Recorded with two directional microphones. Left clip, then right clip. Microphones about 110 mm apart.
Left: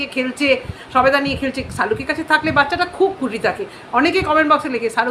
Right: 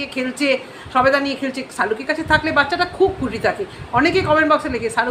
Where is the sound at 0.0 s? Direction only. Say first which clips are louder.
Left 2 dB; 15° left (ahead or behind).